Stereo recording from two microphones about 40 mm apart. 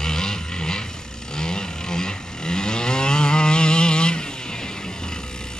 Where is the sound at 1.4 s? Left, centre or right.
Centre.